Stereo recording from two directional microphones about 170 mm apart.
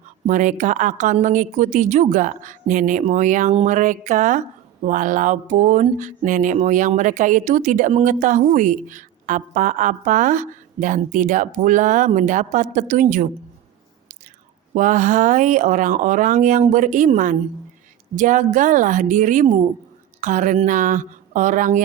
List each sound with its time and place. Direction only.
0.3 s speech: 50° right (ahead or behind)
14.8 s speech: 50° right (ahead or behind)